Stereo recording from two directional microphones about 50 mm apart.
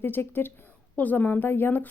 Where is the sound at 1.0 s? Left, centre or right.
Left.